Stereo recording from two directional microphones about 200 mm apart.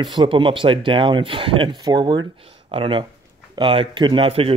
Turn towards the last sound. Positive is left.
turn(degrees=-30)  # may be behind; listen again after turning